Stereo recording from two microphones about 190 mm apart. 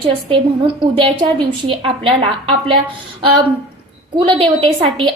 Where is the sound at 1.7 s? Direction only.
30° right (ahead or behind).